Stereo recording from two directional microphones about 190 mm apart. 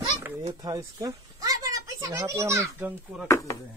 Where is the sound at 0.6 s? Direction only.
20° right (ahead or behind).